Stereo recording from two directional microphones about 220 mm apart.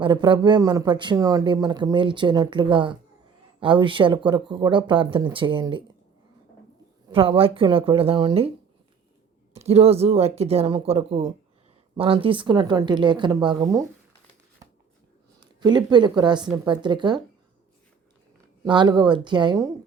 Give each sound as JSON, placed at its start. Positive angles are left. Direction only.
{"t": 0.0, "sound": "speech", "side_deg": -20}
{"t": 7.1, "sound": "speech", "side_deg": -25}
{"t": 9.6, "sound": "speech", "side_deg": -30}
{"t": 15.4, "sound": "speech", "side_deg": -20}
{"t": 18.6, "sound": "speech", "side_deg": -20}